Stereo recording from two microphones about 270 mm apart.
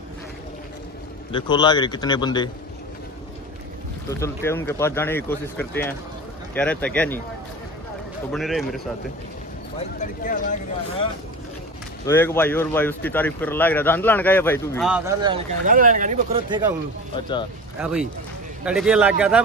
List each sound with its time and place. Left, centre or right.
1.3 s speech: centre
4.1 s a man's voice: centre
8.3 s a man's voice: centre
9.9 s speech: left
12.1 s speech: centre
14.9 s a man's voice: centre
15.2 s speech: right
17.7 s a man's voice: centre